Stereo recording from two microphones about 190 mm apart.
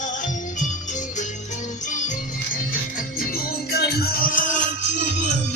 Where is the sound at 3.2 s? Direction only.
55° left (ahead or behind).